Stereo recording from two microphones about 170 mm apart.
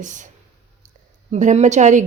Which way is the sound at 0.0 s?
50° right (ahead or behind).